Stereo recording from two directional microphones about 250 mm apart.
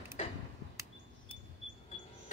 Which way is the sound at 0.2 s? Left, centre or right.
Left.